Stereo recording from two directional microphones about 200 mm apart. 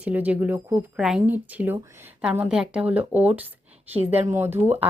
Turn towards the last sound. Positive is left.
turn(degrees=-10)  # may be behind; listen again after turning